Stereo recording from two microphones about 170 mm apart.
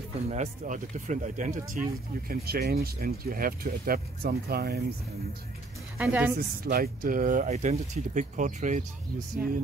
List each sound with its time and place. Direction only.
0.3 s speech: 45° right (ahead or behind); by 4.8 s 70° right (ahead or behind)
5.9 s speech: 10° right (ahead or behind)
6.3 s speech: 60° right (ahead or behind); by 8.8 s 45° right (ahead or behind)